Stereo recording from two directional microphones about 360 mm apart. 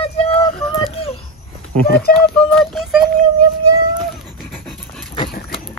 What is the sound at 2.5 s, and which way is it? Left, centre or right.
Speech, centre.